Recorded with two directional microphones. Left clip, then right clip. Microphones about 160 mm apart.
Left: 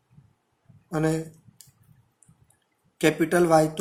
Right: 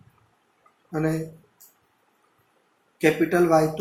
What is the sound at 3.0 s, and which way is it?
Speech, 55° left (ahead or behind).